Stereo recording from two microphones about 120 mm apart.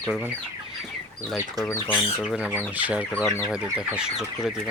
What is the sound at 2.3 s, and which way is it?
Speech, 10° right (ahead or behind).